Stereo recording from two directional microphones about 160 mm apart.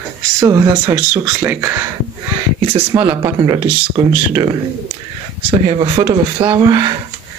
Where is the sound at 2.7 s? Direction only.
25° right (ahead or behind).